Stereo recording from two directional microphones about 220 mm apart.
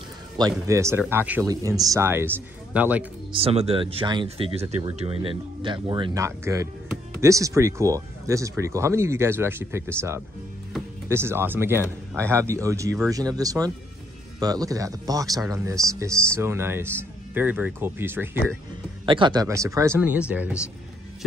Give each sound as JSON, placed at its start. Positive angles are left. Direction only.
{"t": 0.4, "sound": "speech", "side_deg": -15}
{"t": 3.3, "sound": "speech", "side_deg": -25}
{"t": 11.1, "sound": "speech", "side_deg": -10}
{"t": 19.0, "sound": "speech", "side_deg": -20}